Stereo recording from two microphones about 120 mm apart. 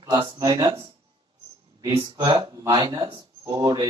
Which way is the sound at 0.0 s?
40° right (ahead or behind).